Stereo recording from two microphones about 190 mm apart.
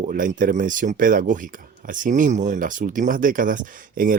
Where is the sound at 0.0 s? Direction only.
45° right (ahead or behind).